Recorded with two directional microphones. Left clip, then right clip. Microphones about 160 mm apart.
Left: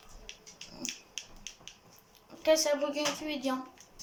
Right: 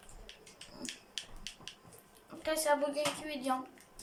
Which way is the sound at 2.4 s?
15° left (ahead or behind).